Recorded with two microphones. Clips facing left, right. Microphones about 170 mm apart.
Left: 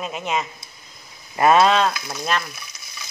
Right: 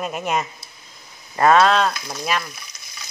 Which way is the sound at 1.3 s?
20° left (ahead or behind).